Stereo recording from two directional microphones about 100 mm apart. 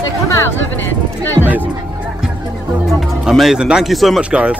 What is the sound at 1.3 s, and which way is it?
Speech, 20° right (ahead or behind).